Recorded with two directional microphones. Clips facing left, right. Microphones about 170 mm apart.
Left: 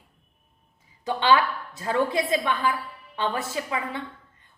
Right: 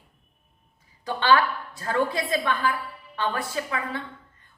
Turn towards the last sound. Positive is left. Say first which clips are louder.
# even
turn(degrees=20)  # may be behind; listen again after turning